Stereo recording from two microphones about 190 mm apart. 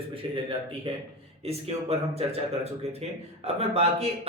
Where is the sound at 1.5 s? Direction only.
30° right (ahead or behind).